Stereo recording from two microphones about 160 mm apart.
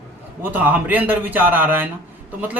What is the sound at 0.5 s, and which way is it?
A man's voice, 10° right (ahead or behind).